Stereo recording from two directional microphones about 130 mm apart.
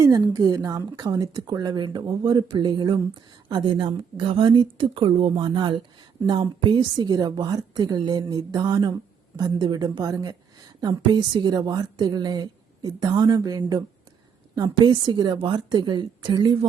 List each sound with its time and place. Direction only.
0.3 s a woman's voice: 30° right (ahead or behind)